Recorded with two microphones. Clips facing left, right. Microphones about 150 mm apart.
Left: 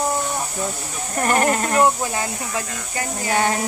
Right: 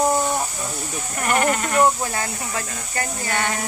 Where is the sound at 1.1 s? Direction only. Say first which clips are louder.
Left 2 dB; 35° left (ahead or behind).